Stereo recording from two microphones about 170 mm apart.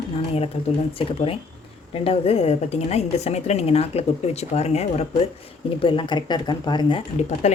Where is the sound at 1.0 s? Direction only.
35° left (ahead or behind).